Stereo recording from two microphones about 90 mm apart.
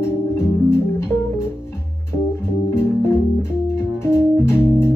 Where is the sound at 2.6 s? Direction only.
30° left (ahead or behind).